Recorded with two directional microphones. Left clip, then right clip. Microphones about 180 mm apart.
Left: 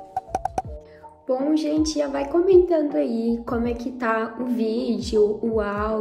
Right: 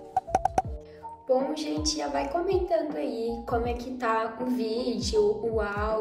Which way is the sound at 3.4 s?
25° left (ahead or behind).